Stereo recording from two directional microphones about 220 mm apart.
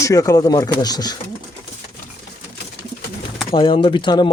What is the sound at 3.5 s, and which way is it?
Speech, 20° left (ahead or behind).